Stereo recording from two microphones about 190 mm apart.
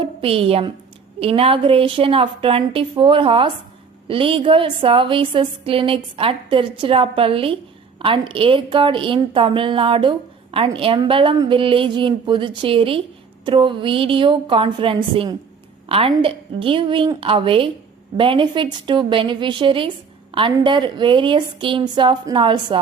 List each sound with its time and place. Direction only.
0.0 s a woman's voice: 30° right (ahead or behind)